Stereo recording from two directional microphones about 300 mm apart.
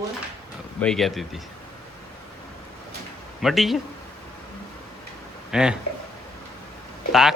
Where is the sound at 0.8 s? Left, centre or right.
Centre.